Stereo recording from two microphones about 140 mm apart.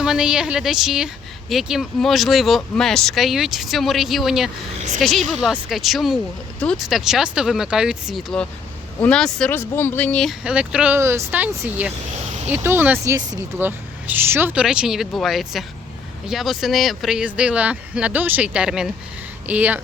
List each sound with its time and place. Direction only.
0.0 s a woman's voice: 5° right (ahead or behind)
10.4 s speech: 5° right (ahead or behind)
11.0 s a woman's voice: 20° right (ahead or behind)